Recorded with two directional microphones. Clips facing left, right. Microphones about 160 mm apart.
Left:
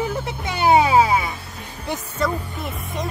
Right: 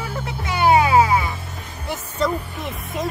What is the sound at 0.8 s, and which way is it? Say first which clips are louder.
Music: left 1 dB; 25° left (ahead or behind).